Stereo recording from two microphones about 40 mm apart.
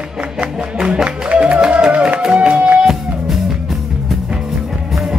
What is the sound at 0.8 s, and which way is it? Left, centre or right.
Music, right.